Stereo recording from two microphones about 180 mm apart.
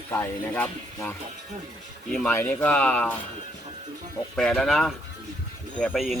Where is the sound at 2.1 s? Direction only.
10° left (ahead or behind).